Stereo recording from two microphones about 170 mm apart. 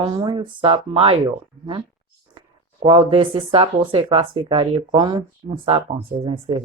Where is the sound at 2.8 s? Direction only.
30° right (ahead or behind).